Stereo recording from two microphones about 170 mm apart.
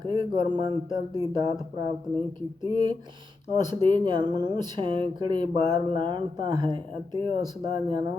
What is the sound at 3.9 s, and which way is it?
Speech, 25° right (ahead or behind).